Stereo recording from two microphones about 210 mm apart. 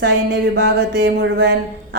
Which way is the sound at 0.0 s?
55° right (ahead or behind).